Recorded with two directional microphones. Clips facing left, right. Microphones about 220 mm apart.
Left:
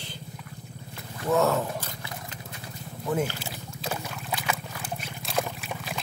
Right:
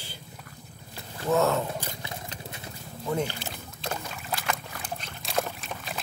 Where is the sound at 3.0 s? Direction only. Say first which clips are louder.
Left 1 dB; 5° left (ahead or behind).